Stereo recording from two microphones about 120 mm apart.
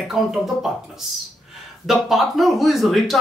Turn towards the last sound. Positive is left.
turn(degrees=0)  # may be behind; listen again after turning